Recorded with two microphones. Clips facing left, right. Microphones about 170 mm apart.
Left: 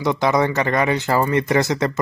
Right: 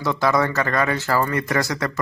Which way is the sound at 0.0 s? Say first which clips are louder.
Left 2 dB; 20° left (ahead or behind).